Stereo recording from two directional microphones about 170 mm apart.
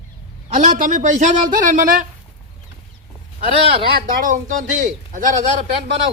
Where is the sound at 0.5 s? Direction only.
50° right (ahead or behind).